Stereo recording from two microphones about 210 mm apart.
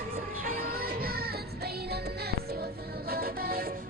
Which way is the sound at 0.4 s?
45° right (ahead or behind).